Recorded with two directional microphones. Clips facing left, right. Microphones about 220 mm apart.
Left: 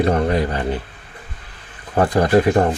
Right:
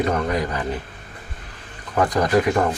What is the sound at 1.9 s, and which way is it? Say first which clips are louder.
Speech: left 4 dB; 30° left (ahead or behind).